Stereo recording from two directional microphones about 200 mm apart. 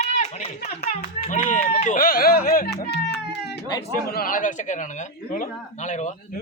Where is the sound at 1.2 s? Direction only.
40° left (ahead or behind).